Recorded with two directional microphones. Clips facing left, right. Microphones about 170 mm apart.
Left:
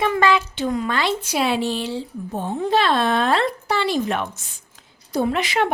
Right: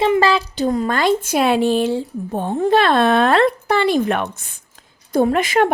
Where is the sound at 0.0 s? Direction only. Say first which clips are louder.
Right 3 dB; 30° right (ahead or behind).